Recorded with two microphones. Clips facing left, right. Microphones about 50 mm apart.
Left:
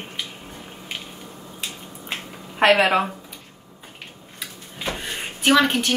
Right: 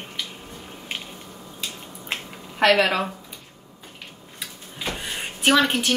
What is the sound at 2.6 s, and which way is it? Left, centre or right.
Speech, centre.